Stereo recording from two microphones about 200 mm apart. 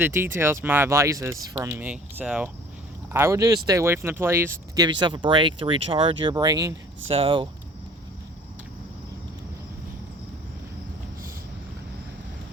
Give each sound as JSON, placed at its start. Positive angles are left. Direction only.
{"t": 0.0, "sound": "speech", "side_deg": -10}